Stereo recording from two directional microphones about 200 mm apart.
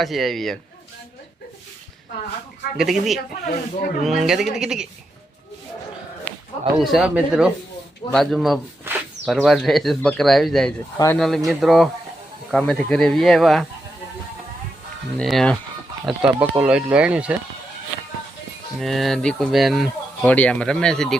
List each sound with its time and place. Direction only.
0.0 s speech: centre (ahead or behind)
2.7 s speech: centre (ahead or behind)
3.4 s speech: 50° left (ahead or behind)
4.0 s speech: centre (ahead or behind)
6.7 s speech: centre (ahead or behind)
10.9 s speech: 15° left (ahead or behind)
11.2 s speech: centre (ahead or behind)
15.2 s speech: centre (ahead or behind)
18.8 s speech: centre (ahead or behind)